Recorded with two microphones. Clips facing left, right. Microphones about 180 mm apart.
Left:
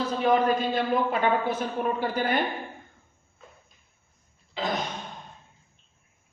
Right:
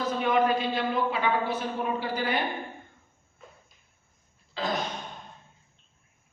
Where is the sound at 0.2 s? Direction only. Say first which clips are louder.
Left 2 dB; 35° left (ahead or behind).